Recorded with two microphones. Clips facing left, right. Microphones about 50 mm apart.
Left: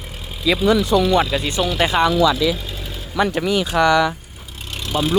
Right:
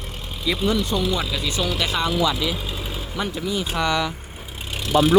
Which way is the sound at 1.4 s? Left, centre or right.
Left.